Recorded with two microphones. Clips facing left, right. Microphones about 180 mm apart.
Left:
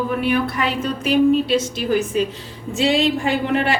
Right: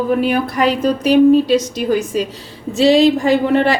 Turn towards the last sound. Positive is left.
turn(degrees=-35)  # may be behind; listen again after turning